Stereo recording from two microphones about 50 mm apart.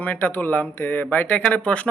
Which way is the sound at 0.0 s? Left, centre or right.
Left.